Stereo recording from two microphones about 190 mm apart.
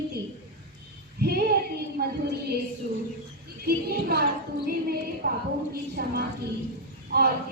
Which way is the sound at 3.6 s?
55° right (ahead or behind).